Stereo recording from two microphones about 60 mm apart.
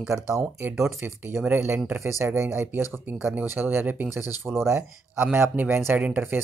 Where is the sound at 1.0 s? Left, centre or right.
Right.